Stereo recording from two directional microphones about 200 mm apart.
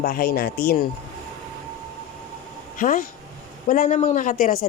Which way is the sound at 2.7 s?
40° left (ahead or behind).